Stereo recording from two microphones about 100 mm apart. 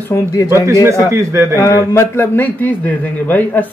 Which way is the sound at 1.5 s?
30° left (ahead or behind).